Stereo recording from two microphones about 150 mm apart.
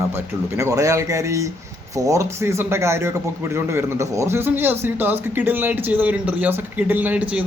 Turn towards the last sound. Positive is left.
turn(degrees=-10)  # may be behind; listen again after turning